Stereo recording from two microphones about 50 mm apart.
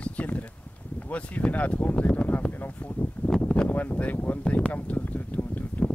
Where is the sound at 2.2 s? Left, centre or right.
Left.